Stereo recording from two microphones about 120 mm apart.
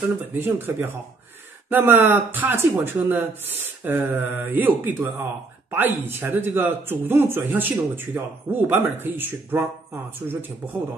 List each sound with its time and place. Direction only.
0.2 s speech: 15° right (ahead or behind)